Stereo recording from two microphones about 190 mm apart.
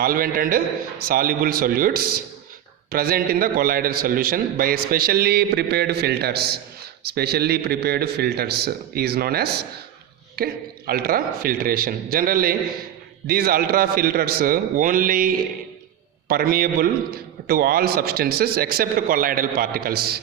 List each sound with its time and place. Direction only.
0.0 s a man's voice: 50° right (ahead or behind)